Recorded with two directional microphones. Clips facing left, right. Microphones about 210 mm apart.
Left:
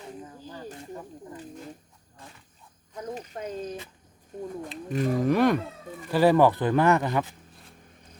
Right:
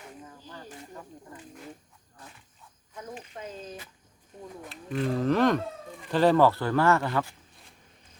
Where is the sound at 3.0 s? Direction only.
40° left (ahead or behind).